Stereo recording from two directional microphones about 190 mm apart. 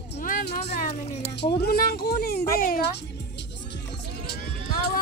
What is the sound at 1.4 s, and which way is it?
Speech, 55° left (ahead or behind).